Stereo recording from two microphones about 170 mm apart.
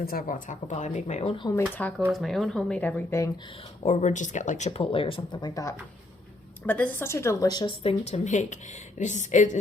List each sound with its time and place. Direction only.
0.0 s a woman's voice: 60° left (ahead or behind); by 1.5 s 35° left (ahead or behind)
1.8 s a woman's voice: 5° left (ahead or behind)
3.8 s speech: 45° left (ahead or behind); by 5.7 s 20° left (ahead or behind)
6.7 s a woman's voice: 10° left (ahead or behind)
7.9 s a woman's voice: 40° left (ahead or behind)